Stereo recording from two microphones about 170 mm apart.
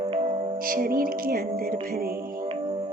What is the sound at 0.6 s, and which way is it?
Music, 55° right (ahead or behind).